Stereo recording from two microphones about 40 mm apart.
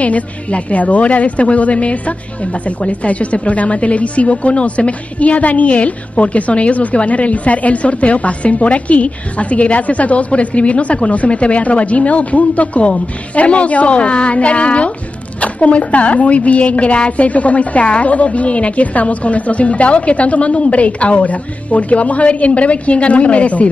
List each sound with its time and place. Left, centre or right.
0.0 s a woman's voice: left